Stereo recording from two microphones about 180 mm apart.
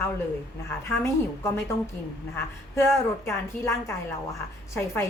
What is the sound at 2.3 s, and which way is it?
A woman's voice, 15° left (ahead or behind).